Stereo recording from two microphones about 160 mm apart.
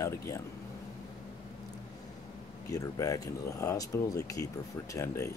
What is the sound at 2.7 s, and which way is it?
Speech, 20° left (ahead or behind).